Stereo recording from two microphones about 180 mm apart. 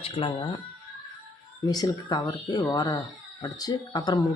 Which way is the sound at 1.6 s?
20° left (ahead or behind).